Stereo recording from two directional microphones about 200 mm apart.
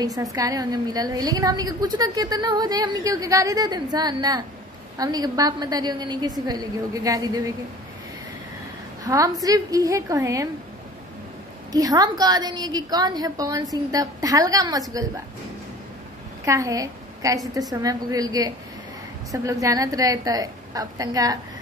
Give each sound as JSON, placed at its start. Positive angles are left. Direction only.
{"t": 0.0, "sound": "a woman's voice", "side_deg": -15}
{"t": 9.0, "sound": "a woman's voice", "side_deg": -15}
{"t": 11.7, "sound": "a woman's voice", "side_deg": -20}
{"t": 16.4, "sound": "a woman's voice", "side_deg": -15}